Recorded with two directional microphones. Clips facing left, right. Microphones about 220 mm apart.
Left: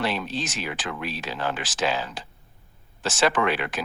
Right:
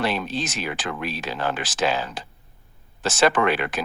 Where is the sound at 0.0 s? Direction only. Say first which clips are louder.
Right 2 dB; 50° right (ahead or behind).